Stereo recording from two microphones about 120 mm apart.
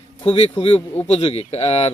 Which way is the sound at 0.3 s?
45° left (ahead or behind).